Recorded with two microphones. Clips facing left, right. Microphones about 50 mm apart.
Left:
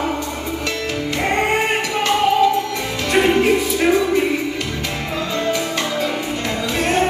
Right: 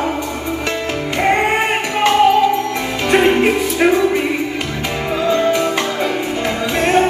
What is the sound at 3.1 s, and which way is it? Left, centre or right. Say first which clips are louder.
Music: right 2 dB; centre.